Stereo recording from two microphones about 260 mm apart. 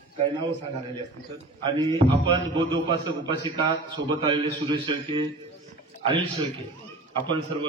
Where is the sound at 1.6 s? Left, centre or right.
Centre.